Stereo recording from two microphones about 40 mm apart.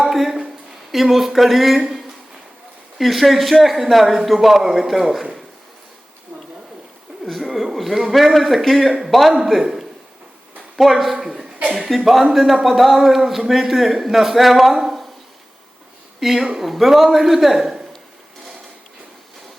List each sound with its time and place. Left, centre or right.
0.0 s a sound: centre
3.0 s a man's voice: centre
7.3 s a man's voice: centre
11.6 s speech: right
12.3 s a man's voice: centre
16.2 s a man's voice: centre